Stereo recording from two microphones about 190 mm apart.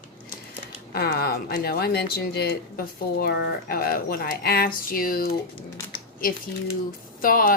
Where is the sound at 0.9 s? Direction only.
55° left (ahead or behind).